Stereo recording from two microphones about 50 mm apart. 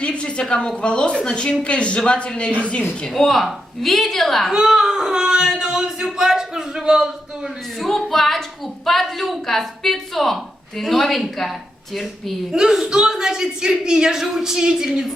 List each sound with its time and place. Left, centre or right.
0.0 s a sound: left
0.8 s speech: left
3.1 s a woman's voice: centre
4.5 s speech: centre
7.8 s a woman's voice: centre
12.5 s speech: centre